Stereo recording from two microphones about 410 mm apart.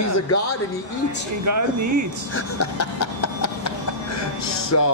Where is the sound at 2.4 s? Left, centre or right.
Left.